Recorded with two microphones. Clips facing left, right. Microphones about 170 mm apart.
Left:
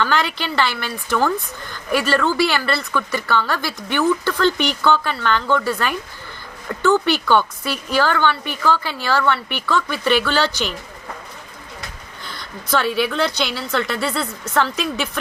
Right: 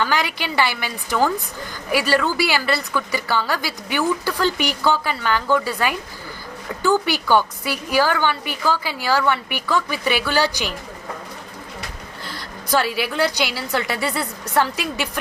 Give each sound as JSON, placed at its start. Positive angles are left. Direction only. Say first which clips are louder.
{"t": 0.0, "sound": "a woman's voice", "louder": "left 1 dB", "side_deg": -10}
{"t": 12.8, "sound": "a woman's voice", "louder": "left 2 dB", "side_deg": -10}